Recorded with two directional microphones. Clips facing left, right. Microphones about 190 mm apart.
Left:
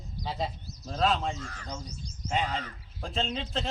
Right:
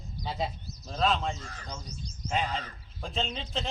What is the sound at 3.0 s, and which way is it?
Speech, centre (ahead or behind).